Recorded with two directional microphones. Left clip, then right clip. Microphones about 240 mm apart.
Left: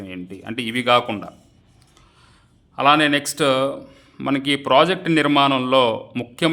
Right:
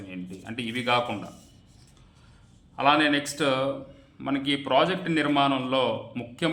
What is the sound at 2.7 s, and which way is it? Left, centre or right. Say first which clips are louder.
A man's voice: left 6 dB; left.